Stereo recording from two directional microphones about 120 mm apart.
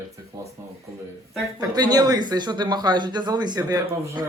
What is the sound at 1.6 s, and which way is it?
Speech, 35° right (ahead or behind).